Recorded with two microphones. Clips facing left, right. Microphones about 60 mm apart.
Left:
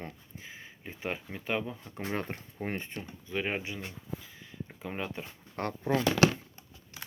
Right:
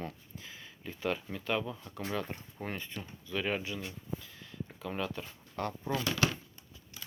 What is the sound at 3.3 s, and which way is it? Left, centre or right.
Speech, left.